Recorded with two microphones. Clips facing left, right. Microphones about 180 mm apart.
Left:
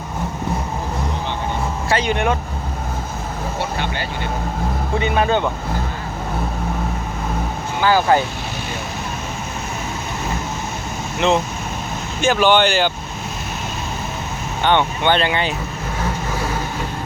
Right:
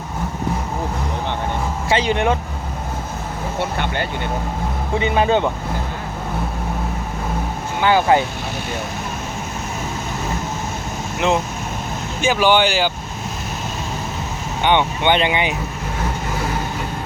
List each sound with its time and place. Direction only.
1.9 s speech: 30° right (ahead or behind)
3.6 s speech: 55° right (ahead or behind)
4.9 s speech: 25° right (ahead or behind)
7.8 s speech: 25° right (ahead or behind)
11.2 s speech: 10° right (ahead or behind)
14.6 s speech: 15° right (ahead or behind)